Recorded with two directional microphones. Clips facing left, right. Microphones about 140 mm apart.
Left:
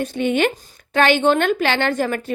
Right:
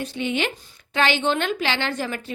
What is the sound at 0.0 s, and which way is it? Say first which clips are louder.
A woman's voice: left 7 dB; 50° left (ahead or behind).